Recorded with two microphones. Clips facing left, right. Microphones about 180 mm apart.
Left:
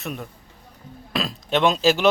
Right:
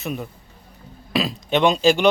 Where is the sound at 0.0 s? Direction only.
Centre (ahead or behind).